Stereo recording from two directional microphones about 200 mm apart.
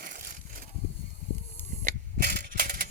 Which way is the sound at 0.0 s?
45° right (ahead or behind).